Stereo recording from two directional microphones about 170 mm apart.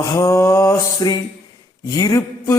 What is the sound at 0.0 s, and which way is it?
Speech, 20° left (ahead or behind).